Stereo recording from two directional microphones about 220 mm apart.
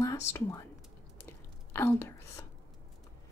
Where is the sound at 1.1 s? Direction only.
10° left (ahead or behind).